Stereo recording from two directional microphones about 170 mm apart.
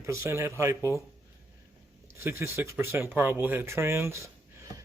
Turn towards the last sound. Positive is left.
turn(degrees=-15)  # may be behind; listen again after turning